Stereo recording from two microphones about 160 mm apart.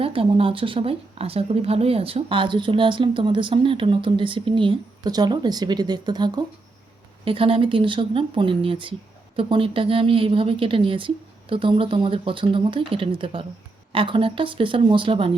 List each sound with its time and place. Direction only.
0.0 s speech: 35° right (ahead or behind)